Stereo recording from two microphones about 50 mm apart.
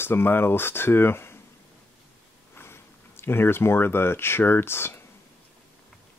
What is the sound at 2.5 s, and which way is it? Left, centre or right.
Speech, left.